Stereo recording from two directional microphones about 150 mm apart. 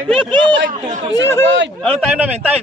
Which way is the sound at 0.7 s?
60° right (ahead or behind).